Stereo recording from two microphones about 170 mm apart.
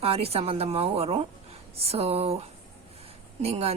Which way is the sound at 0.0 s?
35° right (ahead or behind).